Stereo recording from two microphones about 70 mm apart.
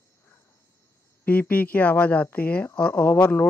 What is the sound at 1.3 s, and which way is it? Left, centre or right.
Speech, left.